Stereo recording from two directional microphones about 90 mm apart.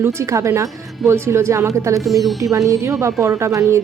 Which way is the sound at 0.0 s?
30° right (ahead or behind).